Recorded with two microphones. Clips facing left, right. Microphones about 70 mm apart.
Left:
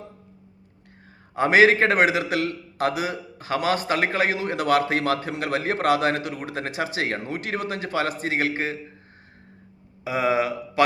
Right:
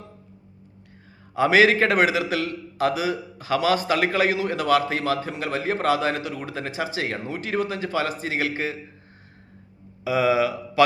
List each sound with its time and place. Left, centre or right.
1.4 s a man's voice: left
10.0 s a man's voice: left